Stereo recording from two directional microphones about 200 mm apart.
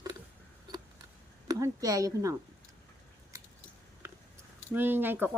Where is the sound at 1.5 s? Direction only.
15° right (ahead or behind).